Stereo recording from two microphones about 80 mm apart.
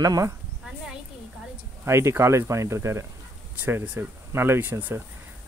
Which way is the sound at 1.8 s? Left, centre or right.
Right.